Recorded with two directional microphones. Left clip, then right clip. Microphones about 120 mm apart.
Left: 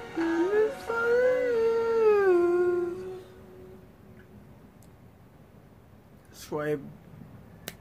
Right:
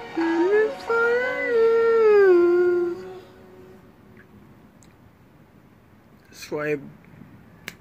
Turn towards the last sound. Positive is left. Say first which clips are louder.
# right 5 dB
turn(degrees=30)  # may be behind; listen again after turning